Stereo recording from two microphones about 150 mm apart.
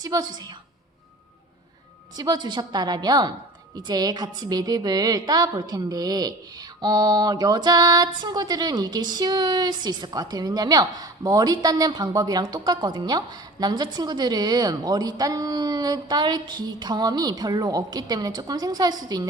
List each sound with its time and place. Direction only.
0.0 s a woman's voice: 25° right (ahead or behind)
2.1 s a woman's voice: 25° right (ahead or behind)